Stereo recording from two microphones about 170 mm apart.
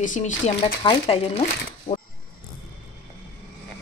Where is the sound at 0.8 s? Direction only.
30° left (ahead or behind).